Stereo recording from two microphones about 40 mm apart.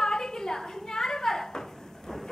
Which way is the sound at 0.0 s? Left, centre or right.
Centre.